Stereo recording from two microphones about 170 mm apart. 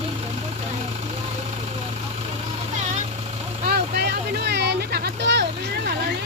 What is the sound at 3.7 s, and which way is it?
Vehicle, 70° right (ahead or behind).